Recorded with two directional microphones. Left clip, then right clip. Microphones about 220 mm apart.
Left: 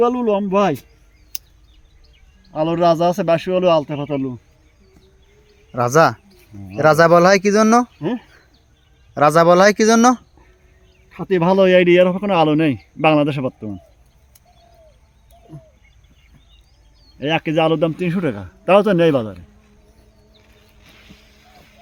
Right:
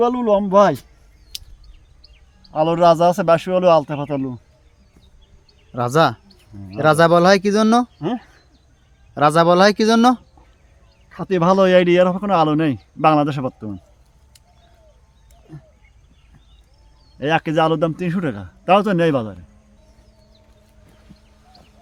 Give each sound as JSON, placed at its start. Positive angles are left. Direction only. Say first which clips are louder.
{"t": 0.0, "sound": "a man's voice", "louder": "even", "side_deg": -15}
{"t": 2.5, "sound": "a man's voice", "louder": "right 2 dB", "side_deg": -15}
{"t": 5.7, "sound": "a man's voice", "louder": "left 3 dB", "side_deg": -5}
{"t": 8.0, "sound": "a man's voice", "louder": "left 1 dB", "side_deg": -15}
{"t": 9.1, "sound": "a man's voice", "louder": "left 2 dB", "side_deg": 0}
{"t": 11.2, "sound": "a man's voice", "louder": "left 1 dB", "side_deg": -10}
{"t": 17.2, "sound": "a man's voice", "louder": "even", "side_deg": -10}